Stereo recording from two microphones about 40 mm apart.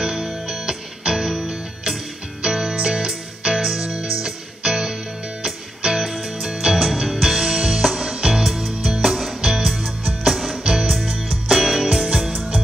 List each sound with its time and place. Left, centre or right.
0.0 s music: centre
3.9 s music: right
5.9 s music: centre
10.6 s music: centre